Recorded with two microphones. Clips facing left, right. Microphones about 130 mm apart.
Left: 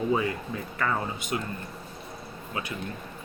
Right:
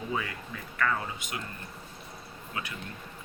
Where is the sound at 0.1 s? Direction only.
30° left (ahead or behind).